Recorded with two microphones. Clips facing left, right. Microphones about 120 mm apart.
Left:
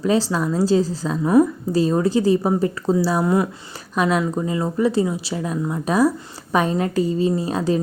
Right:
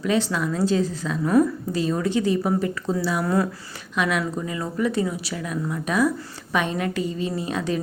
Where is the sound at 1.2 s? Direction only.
15° left (ahead or behind).